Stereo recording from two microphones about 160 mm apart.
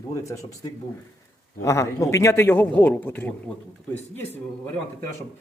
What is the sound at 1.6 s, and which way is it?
A man's voice, 20° left (ahead or behind).